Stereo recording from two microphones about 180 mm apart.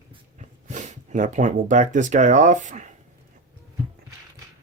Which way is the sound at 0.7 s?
45° right (ahead or behind).